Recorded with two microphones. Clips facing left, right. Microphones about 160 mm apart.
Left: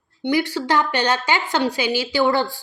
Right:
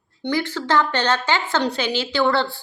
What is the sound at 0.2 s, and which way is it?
A woman's voice, 15° left (ahead or behind).